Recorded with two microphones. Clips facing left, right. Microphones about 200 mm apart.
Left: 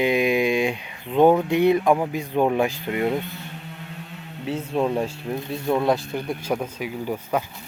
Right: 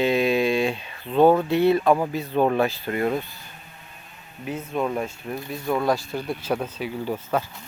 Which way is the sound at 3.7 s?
80° left.